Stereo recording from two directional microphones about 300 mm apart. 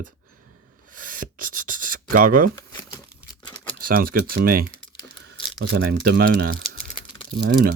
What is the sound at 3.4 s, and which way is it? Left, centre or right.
Crumpling, centre.